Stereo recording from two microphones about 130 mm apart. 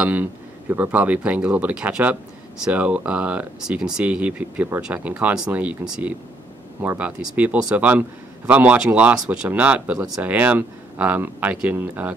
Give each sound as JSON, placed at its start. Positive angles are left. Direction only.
{"t": 0.0, "sound": "speech", "side_deg": -15}